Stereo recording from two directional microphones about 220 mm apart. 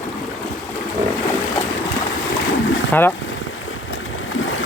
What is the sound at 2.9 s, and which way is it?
Speech, 10° left (ahead or behind).